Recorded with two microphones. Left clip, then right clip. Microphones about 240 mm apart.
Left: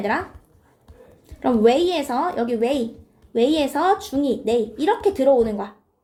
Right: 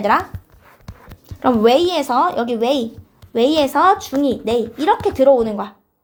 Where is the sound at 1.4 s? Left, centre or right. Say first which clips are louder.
Right 4 dB; right.